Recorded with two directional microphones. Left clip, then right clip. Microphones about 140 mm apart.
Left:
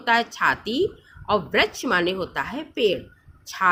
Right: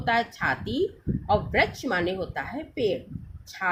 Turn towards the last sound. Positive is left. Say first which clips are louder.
# left 8 dB
turn(degrees=35)  # may be behind; listen again after turning